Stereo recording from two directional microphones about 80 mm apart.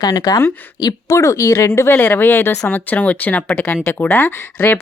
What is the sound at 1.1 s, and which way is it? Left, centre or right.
Speech, left.